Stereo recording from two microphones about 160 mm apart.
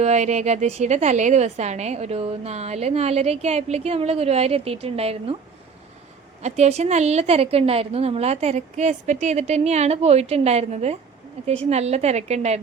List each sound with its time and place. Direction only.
0.0 s a woman's voice: 45° right (ahead or behind)
6.4 s a woman's voice: 45° right (ahead or behind)